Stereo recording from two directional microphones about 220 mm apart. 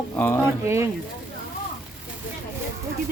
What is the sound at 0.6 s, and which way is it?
Speech, 10° right (ahead or behind).